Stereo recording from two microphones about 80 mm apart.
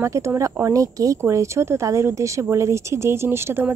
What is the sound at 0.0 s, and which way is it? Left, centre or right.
Speech, right.